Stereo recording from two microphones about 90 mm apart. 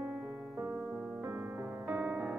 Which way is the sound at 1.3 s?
20° right (ahead or behind).